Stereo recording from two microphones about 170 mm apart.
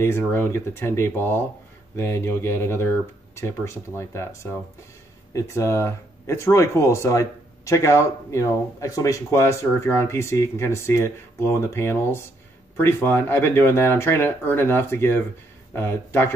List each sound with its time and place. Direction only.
0.0 s speech: 15° left (ahead or behind)